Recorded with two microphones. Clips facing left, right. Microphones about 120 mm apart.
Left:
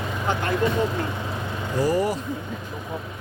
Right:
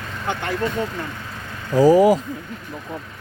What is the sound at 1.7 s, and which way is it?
Speech, 90° right.